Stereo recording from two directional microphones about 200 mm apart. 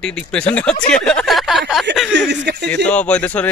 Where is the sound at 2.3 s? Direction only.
55° right (ahead or behind).